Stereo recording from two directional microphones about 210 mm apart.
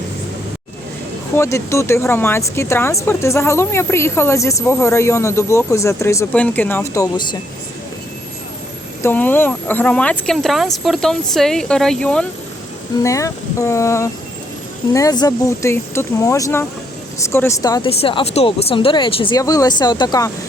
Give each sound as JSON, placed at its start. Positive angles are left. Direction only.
{"t": 1.4, "sound": "speech", "side_deg": 15}
{"t": 9.0, "sound": "speech", "side_deg": 10}